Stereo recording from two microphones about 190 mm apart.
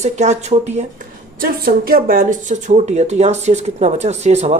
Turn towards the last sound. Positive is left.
turn(degrees=-35)  # may be behind; listen again after turning